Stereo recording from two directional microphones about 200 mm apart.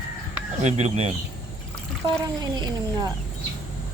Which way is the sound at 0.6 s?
35° right (ahead or behind).